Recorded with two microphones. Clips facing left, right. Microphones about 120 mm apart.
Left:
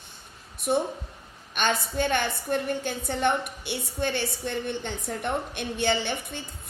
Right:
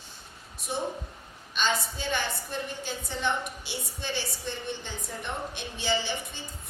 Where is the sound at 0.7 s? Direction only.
55° left (ahead or behind).